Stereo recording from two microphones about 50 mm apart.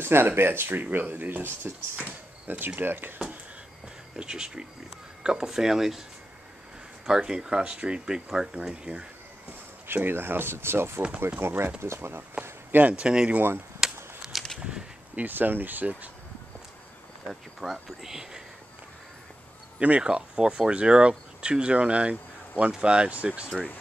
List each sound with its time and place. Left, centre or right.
0.0 s speech: right
4.2 s speech: centre
7.1 s speech: centre
9.5 s speech: right
12.7 s speech: right
13.0 s speech: centre
13.8 s a sound: centre
15.1 s speech: right
17.3 s speech: centre
19.8 s speech: right